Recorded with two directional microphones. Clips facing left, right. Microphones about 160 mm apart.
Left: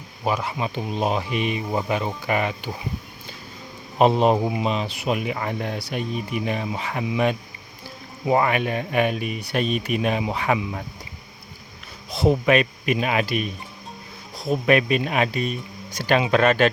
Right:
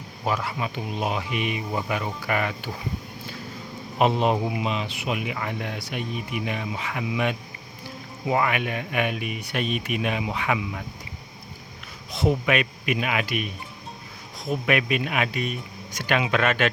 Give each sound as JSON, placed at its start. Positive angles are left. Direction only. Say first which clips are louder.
{"t": 0.3, "sound": "speech", "louder": "left 2 dB", "side_deg": 15}
{"t": 0.6, "sound": "speech", "louder": "left 4 dB", "side_deg": 35}
{"t": 3.9, "sound": "speech", "louder": "left 4 dB", "side_deg": 35}
{"t": 12.1, "sound": "speech", "louder": "left 4 dB", "side_deg": 35}